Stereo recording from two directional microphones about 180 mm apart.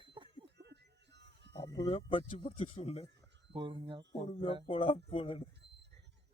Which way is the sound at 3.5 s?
25° right (ahead or behind).